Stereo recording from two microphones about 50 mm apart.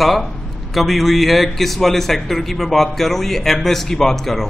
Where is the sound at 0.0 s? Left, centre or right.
Centre.